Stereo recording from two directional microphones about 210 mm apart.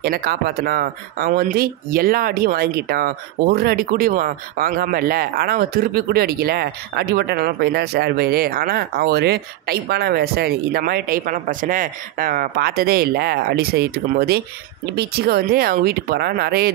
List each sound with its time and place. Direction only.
0.0 s speech: 45° right (ahead or behind)